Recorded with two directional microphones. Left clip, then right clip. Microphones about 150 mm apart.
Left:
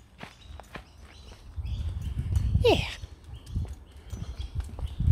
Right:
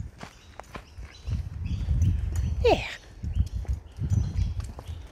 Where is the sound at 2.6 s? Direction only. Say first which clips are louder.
Right 1 dB; 35° left (ahead or behind).